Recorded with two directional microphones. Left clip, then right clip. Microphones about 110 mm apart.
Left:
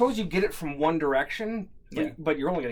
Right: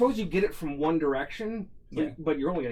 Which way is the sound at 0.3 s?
20° left (ahead or behind).